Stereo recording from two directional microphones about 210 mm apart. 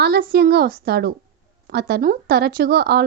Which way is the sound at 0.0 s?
50° right (ahead or behind).